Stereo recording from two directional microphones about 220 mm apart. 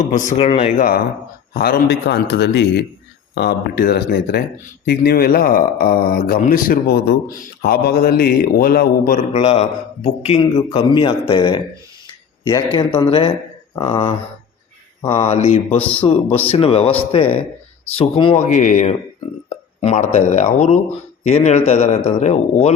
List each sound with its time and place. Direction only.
0.1 s a man's voice: 35° left (ahead or behind)